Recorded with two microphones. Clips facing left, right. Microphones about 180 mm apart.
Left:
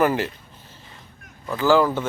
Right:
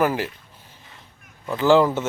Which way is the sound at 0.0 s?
5° right (ahead or behind).